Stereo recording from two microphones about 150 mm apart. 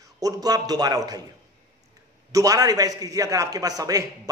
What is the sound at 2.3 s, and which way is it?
A man's voice, 25° right (ahead or behind).